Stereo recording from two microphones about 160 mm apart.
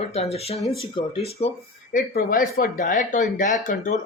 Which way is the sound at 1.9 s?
60° left (ahead or behind).